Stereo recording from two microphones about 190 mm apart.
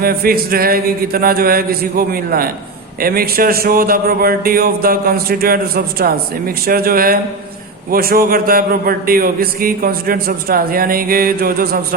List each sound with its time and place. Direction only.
0.0 s a man's voice: 50° right (ahead or behind)